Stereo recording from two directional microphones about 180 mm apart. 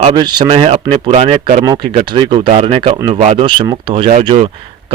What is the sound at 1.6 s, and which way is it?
A man's voice, 25° right (ahead or behind).